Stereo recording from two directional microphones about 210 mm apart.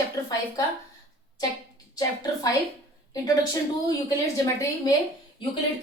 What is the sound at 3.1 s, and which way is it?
Speech, 20° left (ahead or behind).